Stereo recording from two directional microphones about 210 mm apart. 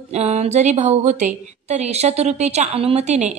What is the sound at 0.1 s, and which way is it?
A woman's voice, 30° right (ahead or behind).